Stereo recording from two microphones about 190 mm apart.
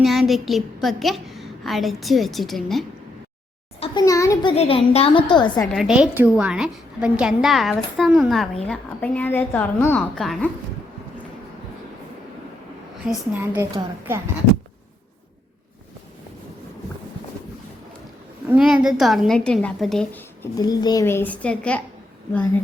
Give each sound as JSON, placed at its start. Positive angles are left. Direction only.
{"t": 0.0, "sound": "a woman's voice", "side_deg": 0}
{"t": 3.8, "sound": "a child's voice", "side_deg": 20}
{"t": 4.5, "sound": "a woman's voice", "side_deg": 35}
{"t": 5.7, "sound": "a woman's voice", "side_deg": -5}
{"t": 13.1, "sound": "a woman's voice", "side_deg": -5}
{"t": 18.4, "sound": "a woman's voice", "side_deg": -5}
{"t": 20.6, "sound": "a woman's voice", "side_deg": 20}